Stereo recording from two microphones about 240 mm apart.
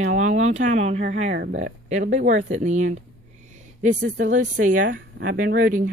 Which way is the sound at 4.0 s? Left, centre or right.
Right.